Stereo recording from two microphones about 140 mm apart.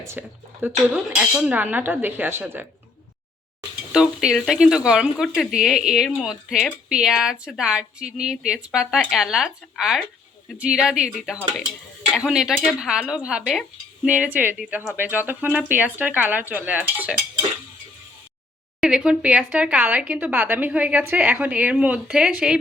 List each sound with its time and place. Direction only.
0.0 s speech: 15° right (ahead or behind)
3.9 s speech: 5° right (ahead or behind)
12.1 s speech: 5° right (ahead or behind)
18.8 s speech: 5° right (ahead or behind)